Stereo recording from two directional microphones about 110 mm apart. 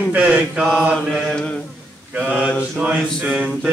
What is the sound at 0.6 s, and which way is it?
Mantra, 5° left (ahead or behind).